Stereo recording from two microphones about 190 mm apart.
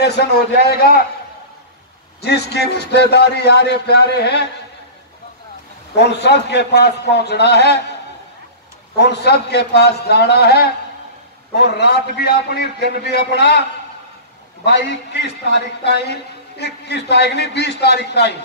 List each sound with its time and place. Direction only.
0.0 s a man's voice: 60° left (ahead or behind)
2.2 s a man's voice: 60° left (ahead or behind)
5.9 s a man's voice: 60° left (ahead or behind)
8.9 s a man's voice: 60° left (ahead or behind)